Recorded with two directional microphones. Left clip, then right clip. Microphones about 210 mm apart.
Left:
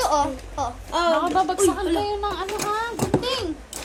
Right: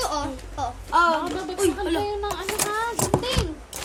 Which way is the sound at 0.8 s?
15° right (ahead or behind).